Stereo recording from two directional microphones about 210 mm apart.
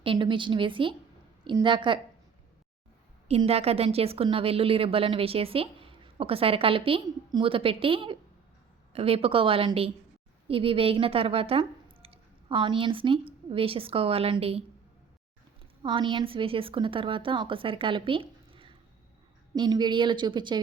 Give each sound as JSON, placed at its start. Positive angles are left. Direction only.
{"t": 0.0, "sound": "a woman's voice", "side_deg": -25}
{"t": 3.2, "sound": "a woman's voice", "side_deg": -30}
{"t": 15.8, "sound": "a woman's voice", "side_deg": -20}